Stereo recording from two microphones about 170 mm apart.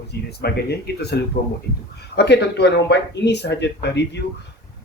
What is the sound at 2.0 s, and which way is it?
Speech, 80° left.